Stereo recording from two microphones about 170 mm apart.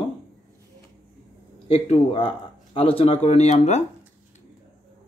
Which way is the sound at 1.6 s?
35° left (ahead or behind).